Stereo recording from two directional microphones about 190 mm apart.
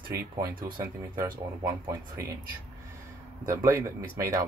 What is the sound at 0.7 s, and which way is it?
Speech, 15° right (ahead or behind).